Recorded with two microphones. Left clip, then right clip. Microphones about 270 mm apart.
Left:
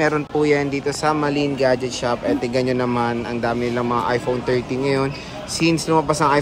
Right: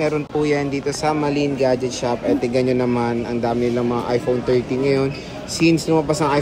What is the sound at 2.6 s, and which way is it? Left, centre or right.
A man's voice, left.